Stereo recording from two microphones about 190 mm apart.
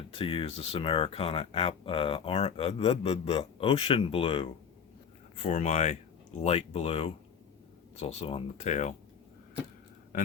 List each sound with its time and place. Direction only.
0.1 s speech: 30° left (ahead or behind)
5.4 s speech: 40° left (ahead or behind)